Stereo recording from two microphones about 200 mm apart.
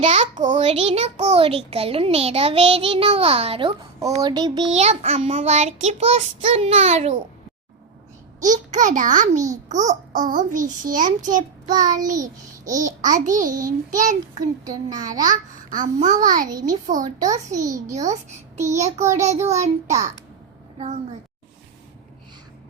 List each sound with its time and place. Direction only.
0.0 s a child's voice: 25° right (ahead or behind)
0.3 s child singing: 40° right (ahead or behind)
0.7 s a child's voice: 30° right (ahead or behind)
4.7 s child singing: 30° right (ahead or behind)
8.4 s child singing: 40° right (ahead or behind)
14.6 s a child's voice: 20° right (ahead or behind)
15.2 s child singing: 40° right (ahead or behind)
17.5 s a child's voice: 15° right (ahead or behind)
18.1 s a child's voice: 35° right (ahead or behind)
18.7 s child singing: 35° right (ahead or behind)